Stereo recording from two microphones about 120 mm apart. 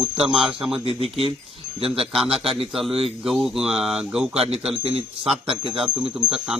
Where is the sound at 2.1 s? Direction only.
Centre (ahead or behind).